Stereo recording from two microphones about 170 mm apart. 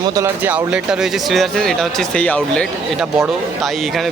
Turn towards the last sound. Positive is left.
turn(degrees=0)  # may be behind; listen again after turning